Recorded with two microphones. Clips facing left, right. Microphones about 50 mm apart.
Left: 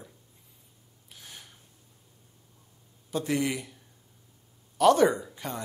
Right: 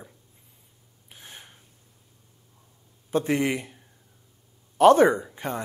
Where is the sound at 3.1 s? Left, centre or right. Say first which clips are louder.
Right 4 dB; right.